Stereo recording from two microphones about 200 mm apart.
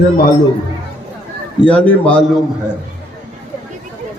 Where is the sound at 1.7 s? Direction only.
5° left (ahead or behind).